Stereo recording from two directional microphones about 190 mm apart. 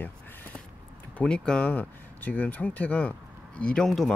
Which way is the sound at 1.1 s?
5° left (ahead or behind).